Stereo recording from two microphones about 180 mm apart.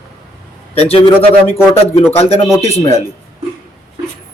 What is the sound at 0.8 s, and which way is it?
Speech, 35° left (ahead or behind).